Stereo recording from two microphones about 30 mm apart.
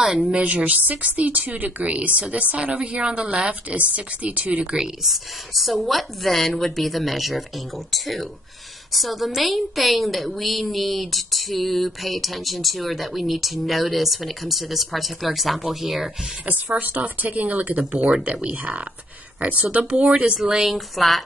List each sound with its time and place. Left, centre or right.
0.0 s speech: centre
0.3 s a woman's voice: right
2.0 s a woman's voice: right
3.0 s speech: right
3.3 s a woman's voice: right
4.6 s a woman's voice: right
5.0 s a woman's voice: centre
16.8 s a woman's voice: right
17.9 s a woman's voice: right
18.5 s a woman's voice: right
19.7 s a woman's voice: right
20.7 s a woman's voice: centre